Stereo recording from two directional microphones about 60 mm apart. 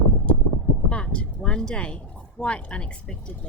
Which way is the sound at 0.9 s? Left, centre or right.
Centre.